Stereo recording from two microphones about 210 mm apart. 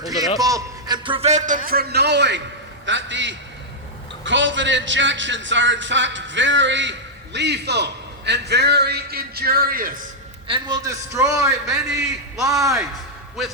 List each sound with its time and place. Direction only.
0.3 s a man's voice: 15° right (ahead or behind); by 10.0 s 45° right (ahead or behind)
10.5 s a man's voice: 15° right (ahead or behind)
11.2 s a man's voice: 5° right (ahead or behind)
12.5 s a man's voice: 15° right (ahead or behind)